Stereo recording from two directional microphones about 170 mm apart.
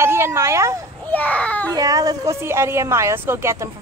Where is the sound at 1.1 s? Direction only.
10° left (ahead or behind).